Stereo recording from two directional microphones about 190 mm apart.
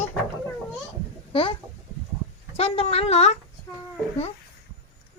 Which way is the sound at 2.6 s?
30° left (ahead or behind).